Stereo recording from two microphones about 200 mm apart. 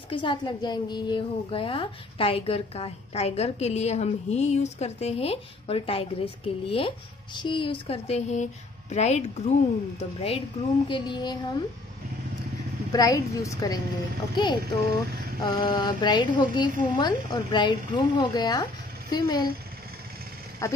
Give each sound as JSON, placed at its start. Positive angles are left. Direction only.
{"t": 0.1, "sound": "a woman's voice", "side_deg": 25}
{"t": 12.9, "sound": "a woman's voice", "side_deg": 15}
{"t": 20.6, "sound": "a woman's voice", "side_deg": 15}